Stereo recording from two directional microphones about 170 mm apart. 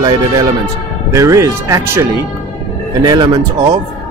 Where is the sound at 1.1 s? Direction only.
20° right (ahead or behind).